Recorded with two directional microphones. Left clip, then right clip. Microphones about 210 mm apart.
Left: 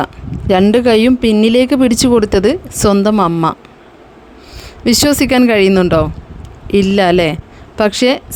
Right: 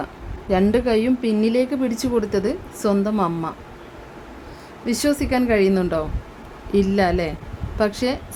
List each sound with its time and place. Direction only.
0.0 s speech: 40° left (ahead or behind)
4.9 s speech: 45° left (ahead or behind)